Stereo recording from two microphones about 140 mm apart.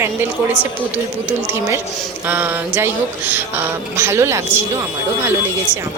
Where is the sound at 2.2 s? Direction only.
15° right (ahead or behind).